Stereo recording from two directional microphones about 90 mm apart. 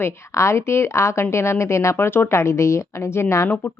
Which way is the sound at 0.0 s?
30° left (ahead or behind).